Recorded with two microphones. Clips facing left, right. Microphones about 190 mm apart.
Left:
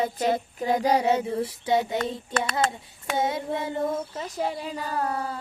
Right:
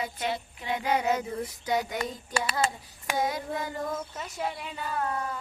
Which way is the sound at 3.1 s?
25° left (ahead or behind).